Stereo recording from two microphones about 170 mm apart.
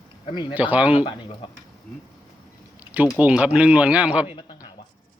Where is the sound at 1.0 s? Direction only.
30° left (ahead or behind).